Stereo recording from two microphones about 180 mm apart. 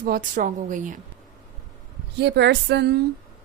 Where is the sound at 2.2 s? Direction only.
70° right (ahead or behind).